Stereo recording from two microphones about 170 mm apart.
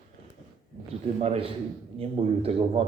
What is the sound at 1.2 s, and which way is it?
Speech, 35° right (ahead or behind).